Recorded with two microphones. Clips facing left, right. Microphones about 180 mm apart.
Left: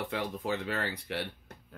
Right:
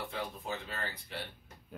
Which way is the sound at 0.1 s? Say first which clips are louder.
Left 6 dB; 65° left (ahead or behind).